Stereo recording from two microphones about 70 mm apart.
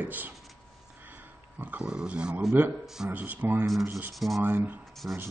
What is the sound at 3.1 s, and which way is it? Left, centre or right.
Speech, right.